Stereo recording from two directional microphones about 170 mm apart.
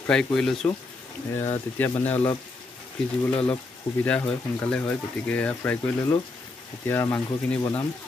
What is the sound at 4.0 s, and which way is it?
Speech, 10° left (ahead or behind).